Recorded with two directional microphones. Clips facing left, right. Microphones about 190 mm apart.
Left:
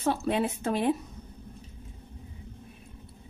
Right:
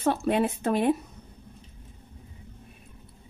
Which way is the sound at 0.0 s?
55° right (ahead or behind).